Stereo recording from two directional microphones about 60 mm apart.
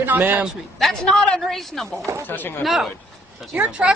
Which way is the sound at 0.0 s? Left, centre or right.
Right.